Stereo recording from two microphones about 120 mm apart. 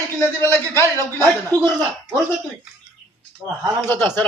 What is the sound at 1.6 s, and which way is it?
Speech, 40° right (ahead or behind).